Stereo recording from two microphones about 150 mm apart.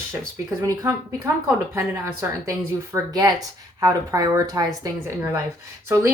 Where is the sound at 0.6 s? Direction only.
25° right (ahead or behind).